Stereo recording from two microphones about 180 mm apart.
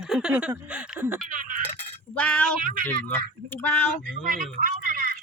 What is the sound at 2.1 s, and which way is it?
Speech, 10° left (ahead or behind).